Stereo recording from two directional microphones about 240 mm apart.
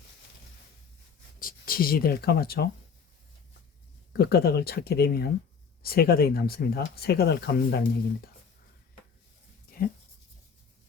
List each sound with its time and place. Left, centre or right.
1.4 s speech: left
4.2 s speech: left